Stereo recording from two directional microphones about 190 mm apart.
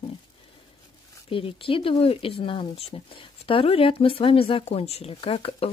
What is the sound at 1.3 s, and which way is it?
A woman's voice, 30° left (ahead or behind).